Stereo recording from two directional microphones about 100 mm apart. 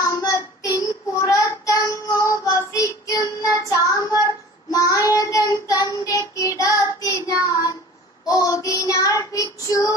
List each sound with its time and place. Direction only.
0.0 s child singing: 35° left (ahead or behind)